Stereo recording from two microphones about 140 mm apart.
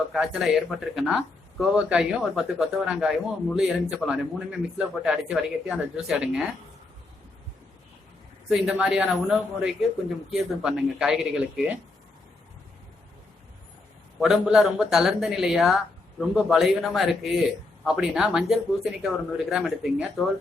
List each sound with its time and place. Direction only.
0.1 s speech: centre (ahead or behind)
8.4 s speech: 5° right (ahead or behind)
14.2 s speech: 5° right (ahead or behind)